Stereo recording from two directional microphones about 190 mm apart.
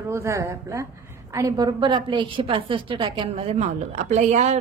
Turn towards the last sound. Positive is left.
turn(degrees=-35)  # may be behind; listen again after turning